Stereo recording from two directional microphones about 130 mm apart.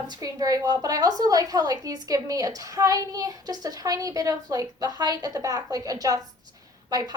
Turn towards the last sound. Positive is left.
turn(degrees=-30)  # may be behind; listen again after turning